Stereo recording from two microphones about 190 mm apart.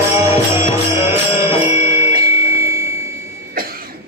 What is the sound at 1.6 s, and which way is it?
Music, 10° right (ahead or behind).